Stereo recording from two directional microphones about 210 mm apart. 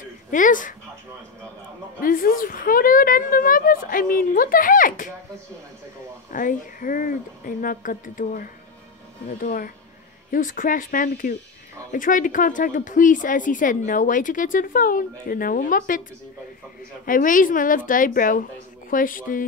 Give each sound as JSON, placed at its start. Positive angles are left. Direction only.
{"t": 0.3, "sound": "a woman's voice", "side_deg": 40}
{"t": 2.0, "sound": "a woman's voice", "side_deg": 40}
{"t": 6.3, "sound": "a woman's voice", "side_deg": 40}
{"t": 17.0, "sound": "a woman's voice", "side_deg": 40}